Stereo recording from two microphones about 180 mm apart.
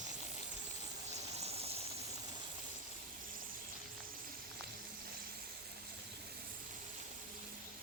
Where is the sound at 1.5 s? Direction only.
35° right (ahead or behind).